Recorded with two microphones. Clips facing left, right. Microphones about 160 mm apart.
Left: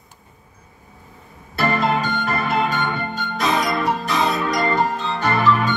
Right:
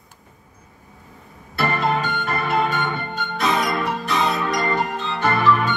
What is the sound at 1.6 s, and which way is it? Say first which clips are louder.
Music: left 2 dB; 40° left (ahead or behind).